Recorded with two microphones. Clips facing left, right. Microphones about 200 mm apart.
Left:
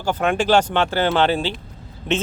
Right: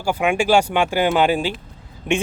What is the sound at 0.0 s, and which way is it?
A man's voice, 10° right (ahead or behind).